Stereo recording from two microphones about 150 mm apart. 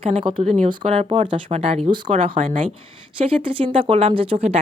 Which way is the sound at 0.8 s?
40° right (ahead or behind).